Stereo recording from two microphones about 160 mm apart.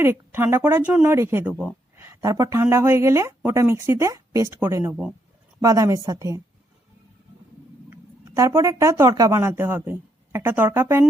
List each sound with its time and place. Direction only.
0.0 s a woman's voice: 15° right (ahead or behind)
7.9 s speech: 20° right (ahead or behind)